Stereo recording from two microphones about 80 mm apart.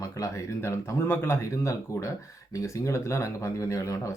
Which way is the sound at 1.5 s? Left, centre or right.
Left.